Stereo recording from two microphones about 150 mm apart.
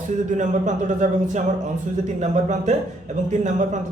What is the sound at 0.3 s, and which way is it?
A man's voice, 55° right (ahead or behind).